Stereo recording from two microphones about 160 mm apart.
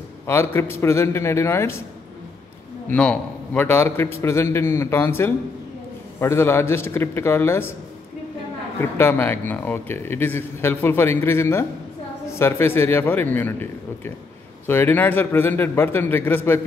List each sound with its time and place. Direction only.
0.3 s a man's voice: 15° left (ahead or behind)
2.9 s a man's voice: 10° left (ahead or behind)
8.9 s a man's voice: 15° left (ahead or behind)